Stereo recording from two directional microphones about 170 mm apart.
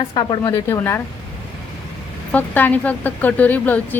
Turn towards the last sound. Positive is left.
turn(degrees=10)  # may be behind; listen again after turning